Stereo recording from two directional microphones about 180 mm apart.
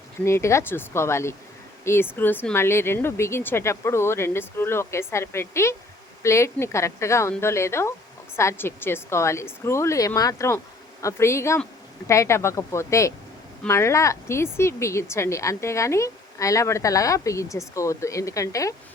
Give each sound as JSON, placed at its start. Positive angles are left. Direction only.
{"t": 0.3, "sound": "a woman's voice", "side_deg": 15}